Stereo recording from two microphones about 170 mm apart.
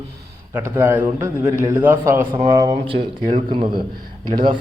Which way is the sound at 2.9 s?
30° right (ahead or behind).